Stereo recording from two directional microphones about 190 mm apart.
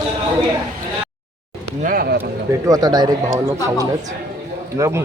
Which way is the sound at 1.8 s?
50° right (ahead or behind).